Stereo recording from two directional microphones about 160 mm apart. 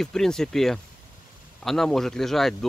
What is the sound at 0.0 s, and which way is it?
Speech, 5° left (ahead or behind).